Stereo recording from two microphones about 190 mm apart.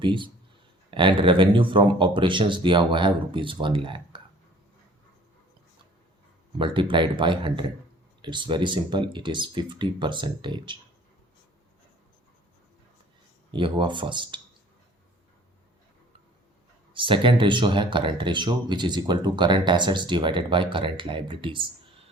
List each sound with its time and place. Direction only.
0.0 s speech: 25° right (ahead or behind)
6.6 s speech: 25° right (ahead or behind)
13.5 s speech: 25° right (ahead or behind)
16.9 s speech: 25° right (ahead or behind)